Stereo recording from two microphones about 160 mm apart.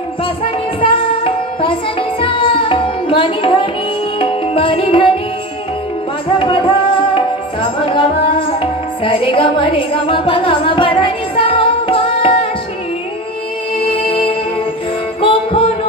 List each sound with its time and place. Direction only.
0.7 s music: 35° left (ahead or behind)
6.3 s music: 35° left (ahead or behind)
7.2 s tabla: 35° left (ahead or behind)
9.0 s music: 35° left (ahead or behind)
13.8 s music: 35° left (ahead or behind)